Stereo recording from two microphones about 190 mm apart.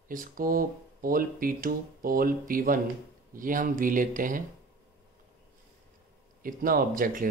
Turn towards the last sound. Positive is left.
turn(degrees=-50)  # may be behind; listen again after turning